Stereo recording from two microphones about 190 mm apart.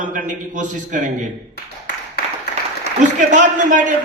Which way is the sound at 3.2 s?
40° right (ahead or behind).